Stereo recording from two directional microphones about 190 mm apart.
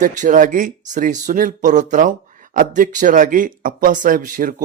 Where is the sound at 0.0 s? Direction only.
45° right (ahead or behind).